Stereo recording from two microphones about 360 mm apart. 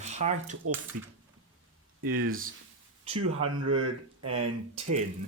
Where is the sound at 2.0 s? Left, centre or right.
Right.